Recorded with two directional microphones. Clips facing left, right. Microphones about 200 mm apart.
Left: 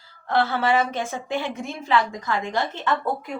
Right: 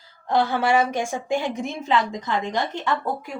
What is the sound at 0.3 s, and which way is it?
A woman's voice, 15° right (ahead or behind).